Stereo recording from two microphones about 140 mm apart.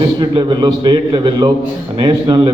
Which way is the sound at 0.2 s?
35° right (ahead or behind).